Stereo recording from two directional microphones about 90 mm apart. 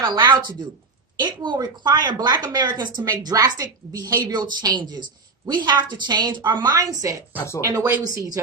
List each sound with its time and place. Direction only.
0.0 s a woman's voice: 55° right (ahead or behind); by 8.2 s 35° right (ahead or behind)